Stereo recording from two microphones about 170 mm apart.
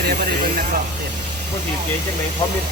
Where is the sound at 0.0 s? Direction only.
70° right (ahead or behind).